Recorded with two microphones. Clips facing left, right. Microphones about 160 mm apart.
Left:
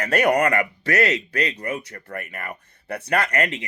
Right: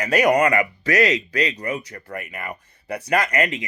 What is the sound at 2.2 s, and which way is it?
Speech, 10° right (ahead or behind).